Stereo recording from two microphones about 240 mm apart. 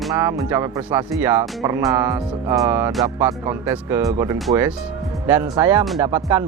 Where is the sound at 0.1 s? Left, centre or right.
Centre.